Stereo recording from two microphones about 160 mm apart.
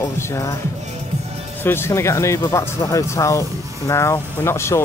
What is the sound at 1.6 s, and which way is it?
Speech, 15° left (ahead or behind).